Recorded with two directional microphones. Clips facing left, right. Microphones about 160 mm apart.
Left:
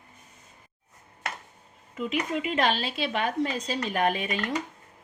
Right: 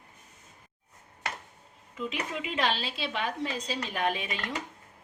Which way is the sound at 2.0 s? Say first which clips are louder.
Left 5 dB; 55° left (ahead or behind).